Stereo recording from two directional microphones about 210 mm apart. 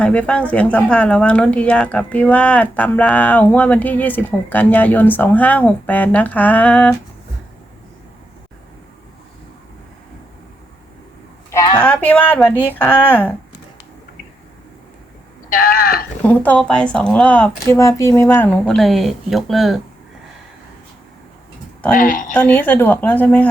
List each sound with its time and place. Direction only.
0.0 s speech: 5° left (ahead or behind)
11.5 s a woman's voice: 20° left (ahead or behind)
11.8 s a woman's voice: 5° left (ahead or behind)
15.4 s speech: 45° left (ahead or behind)
16.2 s a woman's voice: 5° left (ahead or behind)
21.9 s speech: 40° left (ahead or behind)
22.3 s speech: 10° left (ahead or behind)